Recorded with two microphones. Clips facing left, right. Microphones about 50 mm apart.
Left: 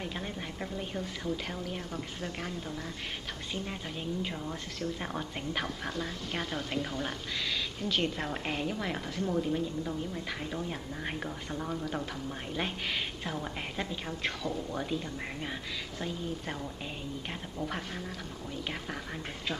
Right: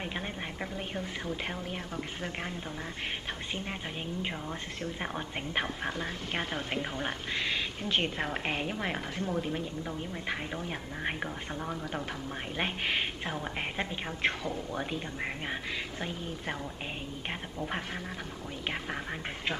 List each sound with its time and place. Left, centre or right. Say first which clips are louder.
0.0 s a woman's voice: right 1 dB; right
3.5 s a woman's voice: right 1 dB; right
4.5 s a woman's voice: left 1 dB; right
11.2 s speech: even; centre
11.7 s a woman's voice: left 1 dB; right
17.6 s speech: right 3 dB; right